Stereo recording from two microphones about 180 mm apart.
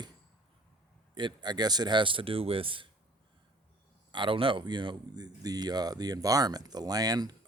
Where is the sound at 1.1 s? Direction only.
25° right (ahead or behind).